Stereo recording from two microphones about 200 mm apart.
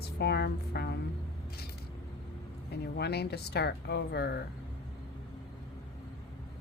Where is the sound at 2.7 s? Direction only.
55° left (ahead or behind).